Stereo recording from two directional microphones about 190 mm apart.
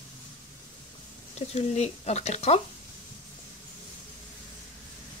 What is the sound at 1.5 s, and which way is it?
Speech, 35° left (ahead or behind).